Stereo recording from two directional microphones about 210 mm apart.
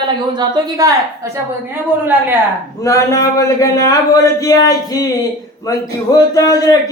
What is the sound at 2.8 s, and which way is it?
Speech, 15° left (ahead or behind).